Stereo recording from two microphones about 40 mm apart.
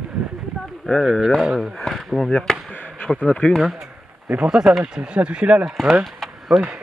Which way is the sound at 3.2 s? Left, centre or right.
Left.